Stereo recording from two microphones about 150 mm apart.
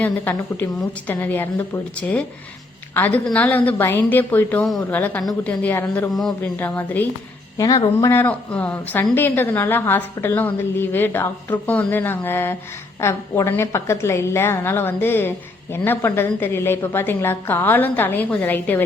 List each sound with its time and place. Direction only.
0.0 s a woman's voice: 10° left (ahead or behind)
6.6 s a woman's voice: 15° left (ahead or behind)